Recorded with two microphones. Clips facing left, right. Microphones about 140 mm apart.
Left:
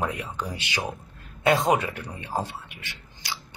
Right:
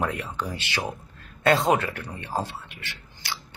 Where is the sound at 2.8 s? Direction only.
15° left (ahead or behind).